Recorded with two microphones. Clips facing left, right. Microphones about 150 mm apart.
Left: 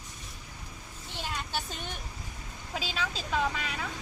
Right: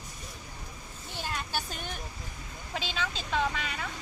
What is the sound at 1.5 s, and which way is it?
Vehicle, centre (ahead or behind).